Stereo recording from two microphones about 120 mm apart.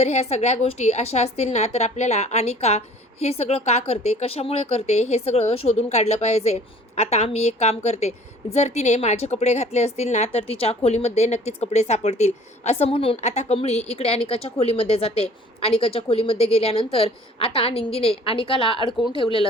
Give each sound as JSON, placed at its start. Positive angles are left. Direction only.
{"t": 0.0, "sound": "a woman's voice", "side_deg": 65}
{"t": 13.2, "sound": "a woman's voice", "side_deg": 65}